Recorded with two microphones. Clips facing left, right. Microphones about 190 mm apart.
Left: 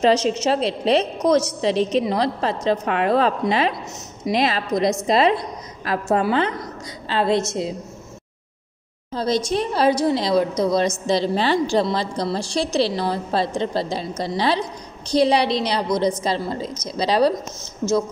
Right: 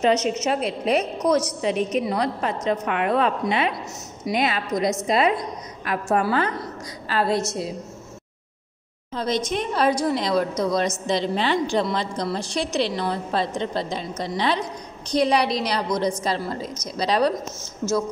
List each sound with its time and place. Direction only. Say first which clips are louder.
0.0 s a woman's voice: left 3 dB; 30° left (ahead or behind)
9.1 s a woman's voice: left 3 dB; 35° left (ahead or behind)